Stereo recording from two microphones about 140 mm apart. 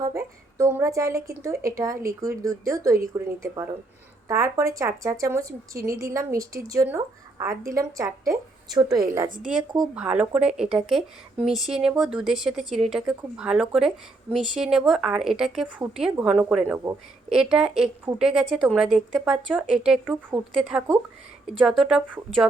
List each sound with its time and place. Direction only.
0.0 s speech: 25° right (ahead or behind)
9.5 s speech: centre (ahead or behind)